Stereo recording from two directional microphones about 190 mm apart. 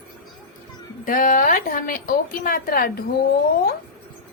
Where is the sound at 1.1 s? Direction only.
45° left (ahead or behind).